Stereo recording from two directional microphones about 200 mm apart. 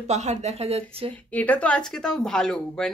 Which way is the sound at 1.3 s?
10° left (ahead or behind).